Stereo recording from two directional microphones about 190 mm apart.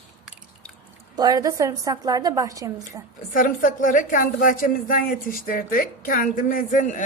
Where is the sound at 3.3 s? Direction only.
45° left (ahead or behind).